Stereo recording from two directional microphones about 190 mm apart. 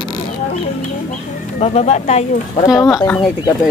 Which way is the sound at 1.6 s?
35° left (ahead or behind).